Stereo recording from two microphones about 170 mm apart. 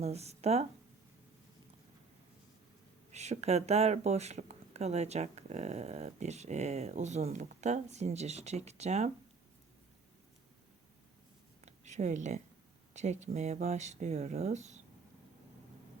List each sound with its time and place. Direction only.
0.0 s speech: 40° right (ahead or behind)
3.1 s speech: 40° right (ahead or behind)
11.6 s a sound: 40° right (ahead or behind)
12.9 s speech: 45° right (ahead or behind)